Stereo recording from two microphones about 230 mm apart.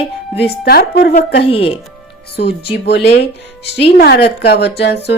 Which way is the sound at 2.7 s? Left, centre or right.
Left.